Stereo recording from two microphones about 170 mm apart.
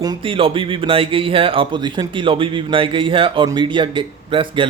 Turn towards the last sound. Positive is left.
turn(degrees=-30)  # may be behind; listen again after turning